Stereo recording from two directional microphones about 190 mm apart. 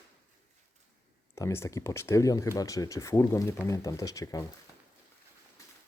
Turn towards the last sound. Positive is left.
turn(degrees=15)  # may be behind; listen again after turning